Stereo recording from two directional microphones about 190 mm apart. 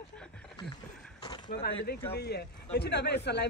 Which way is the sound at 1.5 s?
60° left (ahead or behind).